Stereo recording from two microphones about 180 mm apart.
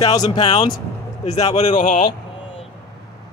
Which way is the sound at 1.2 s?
35° left (ahead or behind).